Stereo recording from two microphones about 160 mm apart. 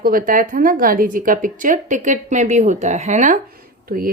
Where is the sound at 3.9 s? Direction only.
65° right (ahead or behind).